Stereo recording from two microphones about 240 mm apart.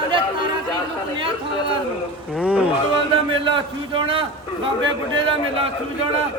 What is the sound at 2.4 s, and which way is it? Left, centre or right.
Speech, centre.